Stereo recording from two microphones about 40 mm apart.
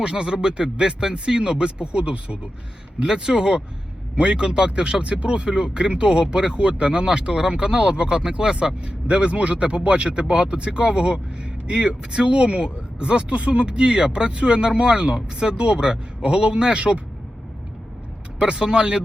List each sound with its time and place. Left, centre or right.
0.0 s speech: right
3.0 s speech: centre
18.3 s speech: right